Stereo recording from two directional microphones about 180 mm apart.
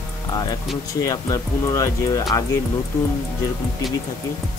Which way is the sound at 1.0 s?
20° left (ahead or behind).